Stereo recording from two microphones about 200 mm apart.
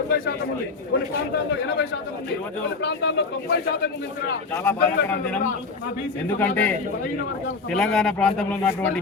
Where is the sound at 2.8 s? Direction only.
60° left (ahead or behind).